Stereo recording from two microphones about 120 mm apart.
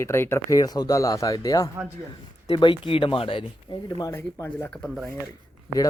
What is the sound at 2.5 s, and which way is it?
Speech, 40° left (ahead or behind).